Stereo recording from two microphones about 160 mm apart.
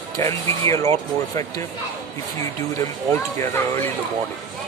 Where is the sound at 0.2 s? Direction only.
20° left (ahead or behind).